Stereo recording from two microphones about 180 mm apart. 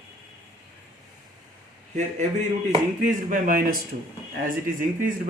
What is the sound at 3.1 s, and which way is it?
Speech, 50° right (ahead or behind).